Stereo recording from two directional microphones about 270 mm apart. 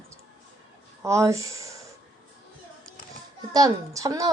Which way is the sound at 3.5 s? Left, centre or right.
Centre.